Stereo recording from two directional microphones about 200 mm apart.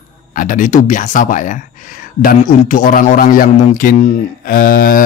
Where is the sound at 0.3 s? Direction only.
40° left (ahead or behind).